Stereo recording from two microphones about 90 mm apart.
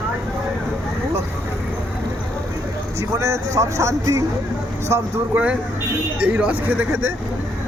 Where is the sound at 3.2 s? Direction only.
35° right (ahead or behind).